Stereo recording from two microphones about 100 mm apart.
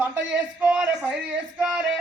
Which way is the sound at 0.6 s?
10° right (ahead or behind).